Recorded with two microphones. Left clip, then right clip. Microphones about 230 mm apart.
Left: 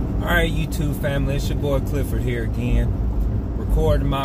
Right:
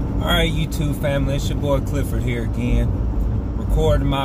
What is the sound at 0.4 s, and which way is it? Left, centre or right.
Speech, centre.